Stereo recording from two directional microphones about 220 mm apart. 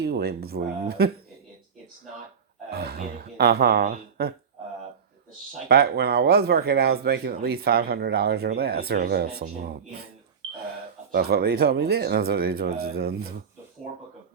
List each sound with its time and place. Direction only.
0.0 s speech: 45° right (ahead or behind)
2.6 s speech: 45° right (ahead or behind)
5.6 s speech: 45° right (ahead or behind)
11.1 s speech: 45° right (ahead or behind)